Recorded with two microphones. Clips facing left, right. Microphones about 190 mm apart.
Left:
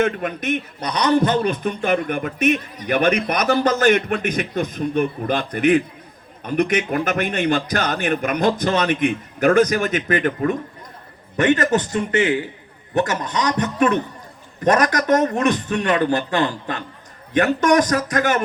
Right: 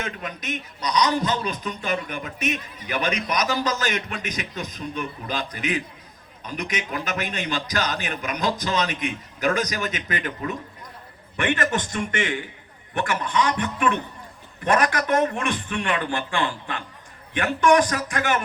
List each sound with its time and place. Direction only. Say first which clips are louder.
0.0 s a man's voice: left 11 dB; 55° left (ahead or behind)
11.3 s a man's voice: left 7 dB; 40° left (ahead or behind)